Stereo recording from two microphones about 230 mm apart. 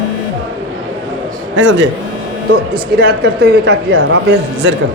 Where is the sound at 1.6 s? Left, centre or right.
Right.